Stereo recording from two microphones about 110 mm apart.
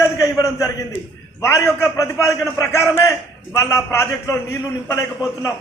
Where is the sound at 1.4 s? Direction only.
25° left (ahead or behind).